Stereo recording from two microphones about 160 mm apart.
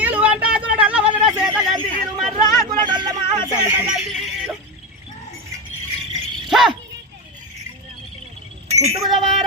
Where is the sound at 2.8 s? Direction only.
30° right (ahead or behind).